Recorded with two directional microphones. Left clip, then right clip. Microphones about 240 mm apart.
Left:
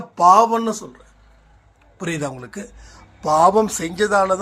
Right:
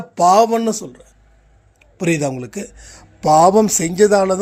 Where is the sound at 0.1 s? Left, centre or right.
Right.